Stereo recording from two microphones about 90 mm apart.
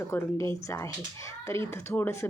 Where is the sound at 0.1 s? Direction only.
35° left (ahead or behind).